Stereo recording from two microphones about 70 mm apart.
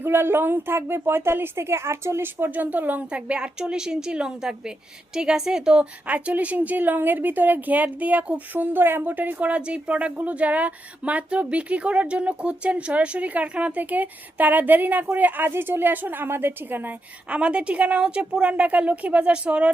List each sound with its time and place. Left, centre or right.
0.0 s a woman's voice: right; by 19.7 s centre